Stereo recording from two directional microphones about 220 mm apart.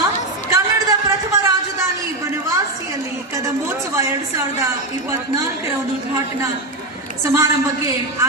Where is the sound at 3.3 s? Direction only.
15° right (ahead or behind).